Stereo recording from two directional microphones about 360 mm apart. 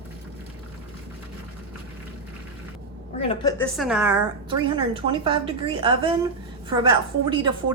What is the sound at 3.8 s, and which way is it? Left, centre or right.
Speech, centre.